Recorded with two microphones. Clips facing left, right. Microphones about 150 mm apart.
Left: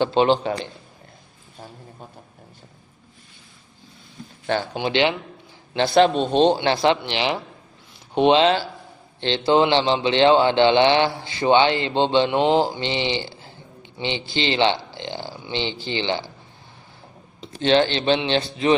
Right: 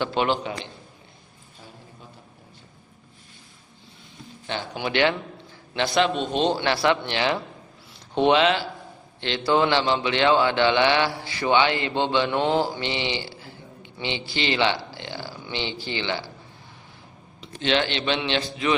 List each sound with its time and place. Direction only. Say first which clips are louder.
0.0 s a man's voice: left 6 dB; 30° left (ahead or behind)
4.7 s a man's voice: right 1 dB; 25° left (ahead or behind)
5.7 s a man's voice: left 6 dB; 35° left (ahead or behind)
8.4 s a man's voice: left 3 dB; 30° left (ahead or behind)
17.4 s a man's voice: left 6 dB; 35° left (ahead or behind)